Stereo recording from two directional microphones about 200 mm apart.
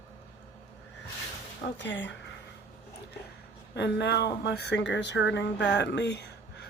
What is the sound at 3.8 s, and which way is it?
Speech, 60° left (ahead or behind).